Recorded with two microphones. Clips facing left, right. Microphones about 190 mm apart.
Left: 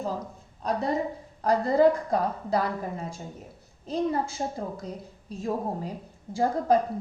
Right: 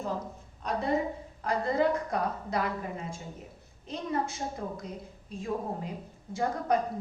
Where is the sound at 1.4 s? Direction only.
35° left (ahead or behind).